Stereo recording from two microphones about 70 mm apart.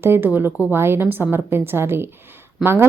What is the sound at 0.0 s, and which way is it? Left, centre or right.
A woman's voice, right.